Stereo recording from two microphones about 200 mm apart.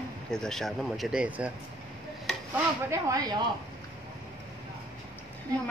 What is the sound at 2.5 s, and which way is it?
Speech, 15° right (ahead or behind).